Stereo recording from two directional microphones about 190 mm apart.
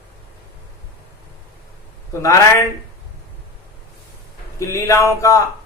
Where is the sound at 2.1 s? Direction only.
15° left (ahead or behind).